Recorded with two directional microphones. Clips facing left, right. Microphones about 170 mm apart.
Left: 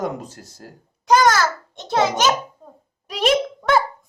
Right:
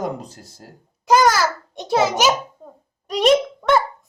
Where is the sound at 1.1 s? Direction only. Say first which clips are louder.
Even; 5° right (ahead or behind).